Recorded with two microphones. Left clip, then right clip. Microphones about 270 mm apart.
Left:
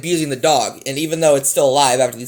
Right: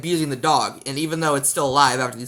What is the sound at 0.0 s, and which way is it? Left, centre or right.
Speech, right.